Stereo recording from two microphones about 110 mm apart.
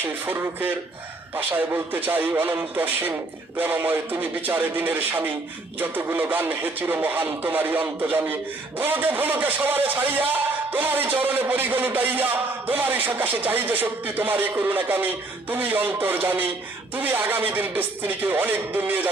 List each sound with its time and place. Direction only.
0.0 s a man's voice: 20° right (ahead or behind)